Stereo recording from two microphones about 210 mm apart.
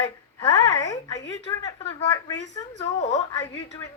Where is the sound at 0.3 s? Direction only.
15° left (ahead or behind).